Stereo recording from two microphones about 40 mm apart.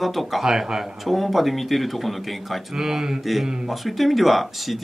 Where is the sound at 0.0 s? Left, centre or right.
Centre.